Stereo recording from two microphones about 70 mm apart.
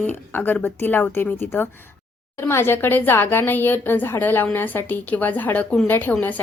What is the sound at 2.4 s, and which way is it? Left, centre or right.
A woman's voice, left.